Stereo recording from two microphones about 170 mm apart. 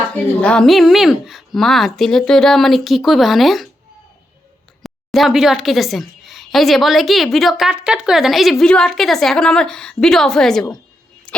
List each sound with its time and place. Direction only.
0.3 s a woman's voice: 5° left (ahead or behind)
4.8 s a woman's voice: centre (ahead or behind)